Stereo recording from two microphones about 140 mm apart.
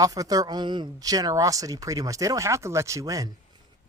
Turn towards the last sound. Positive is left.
turn(degrees=-25)  # may be behind; listen again after turning